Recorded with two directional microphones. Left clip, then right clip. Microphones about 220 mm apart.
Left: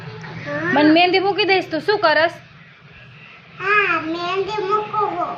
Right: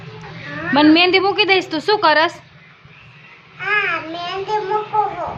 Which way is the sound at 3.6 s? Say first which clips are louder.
Left 2 dB; 15° right (ahead or behind).